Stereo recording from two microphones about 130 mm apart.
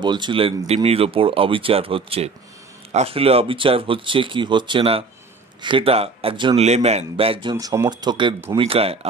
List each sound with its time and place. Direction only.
0.0 s speech: 35° right (ahead or behind)
6.5 s speech: 55° right (ahead or behind)
7.5 s speech: 25° right (ahead or behind)
8.5 s speech: 50° right (ahead or behind)